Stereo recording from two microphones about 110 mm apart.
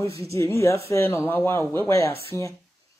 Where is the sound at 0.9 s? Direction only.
25° left (ahead or behind).